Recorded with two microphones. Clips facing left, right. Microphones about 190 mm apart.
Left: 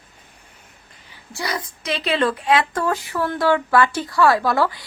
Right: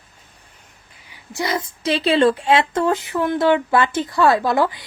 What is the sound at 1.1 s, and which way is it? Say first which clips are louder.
A woman's voice: right 4 dB; 20° right (ahead or behind).